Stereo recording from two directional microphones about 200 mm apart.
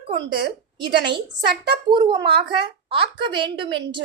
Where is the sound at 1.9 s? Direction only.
20° right (ahead or behind).